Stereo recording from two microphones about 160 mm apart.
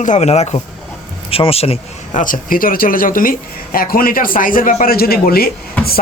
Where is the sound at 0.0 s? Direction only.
45° left (ahead or behind).